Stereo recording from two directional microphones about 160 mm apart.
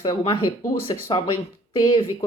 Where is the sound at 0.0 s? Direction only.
30° left (ahead or behind).